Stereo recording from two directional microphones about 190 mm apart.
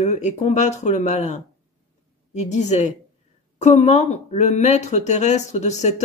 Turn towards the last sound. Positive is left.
turn(degrees=35)  # may be behind; listen again after turning